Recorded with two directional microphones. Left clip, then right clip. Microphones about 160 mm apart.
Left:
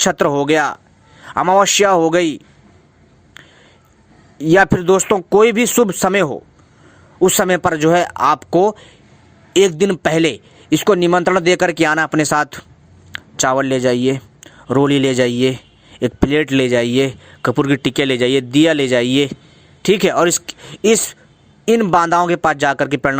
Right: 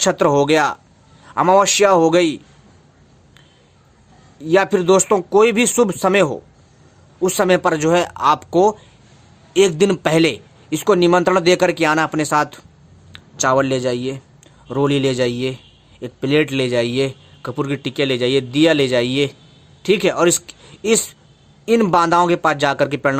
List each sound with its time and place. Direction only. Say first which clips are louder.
0.0 s speech: even; 45° left (ahead or behind)
4.4 s speech: left 3 dB; 45° left (ahead or behind)
13.1 s speech: even; 55° left (ahead or behind)